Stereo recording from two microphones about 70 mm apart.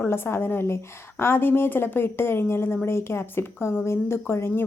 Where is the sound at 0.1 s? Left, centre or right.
Left.